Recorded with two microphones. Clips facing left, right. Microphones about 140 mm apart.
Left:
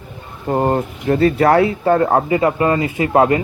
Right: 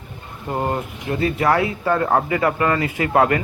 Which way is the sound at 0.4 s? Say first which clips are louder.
Left 6 dB; 35° left (ahead or behind).